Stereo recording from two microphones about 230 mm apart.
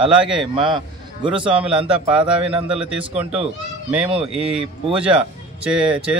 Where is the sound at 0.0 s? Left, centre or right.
Centre.